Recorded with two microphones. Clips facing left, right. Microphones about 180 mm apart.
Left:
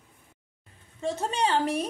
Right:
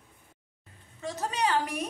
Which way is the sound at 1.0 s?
25° left (ahead or behind).